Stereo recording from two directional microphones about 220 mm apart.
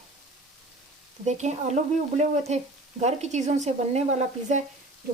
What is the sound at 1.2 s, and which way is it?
Speech, 30° right (ahead or behind).